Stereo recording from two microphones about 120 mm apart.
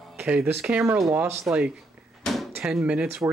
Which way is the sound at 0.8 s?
25° right (ahead or behind).